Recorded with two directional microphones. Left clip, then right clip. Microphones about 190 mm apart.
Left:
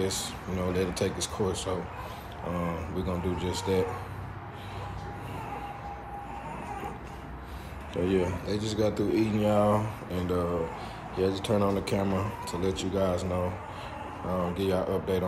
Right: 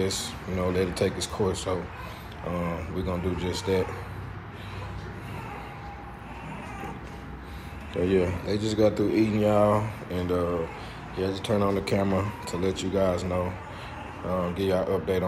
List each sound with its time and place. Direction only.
0.0 s speech: 15° left (ahead or behind)
7.9 s speech: 15° left (ahead or behind)
11.4 s speech: 20° left (ahead or behind)